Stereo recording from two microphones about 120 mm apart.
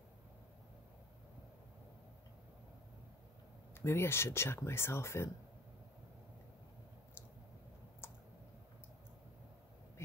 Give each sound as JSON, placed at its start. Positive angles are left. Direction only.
{"t": 3.8, "sound": "speech", "side_deg": 20}
{"t": 8.0, "sound": "clicking", "side_deg": 20}